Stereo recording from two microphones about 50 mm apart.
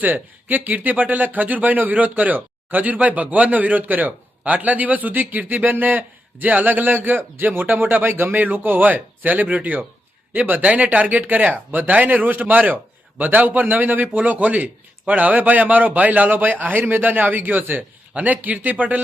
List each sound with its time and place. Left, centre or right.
0.0 s speech: right